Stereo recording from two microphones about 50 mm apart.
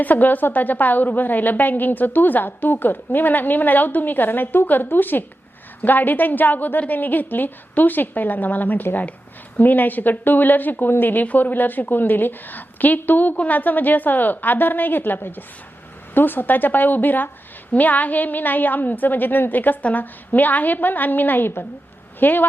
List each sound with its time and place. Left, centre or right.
0.0 s a woman's voice: left